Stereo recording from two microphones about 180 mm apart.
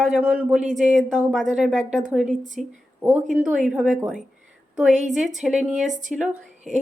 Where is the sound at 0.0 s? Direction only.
5° right (ahead or behind).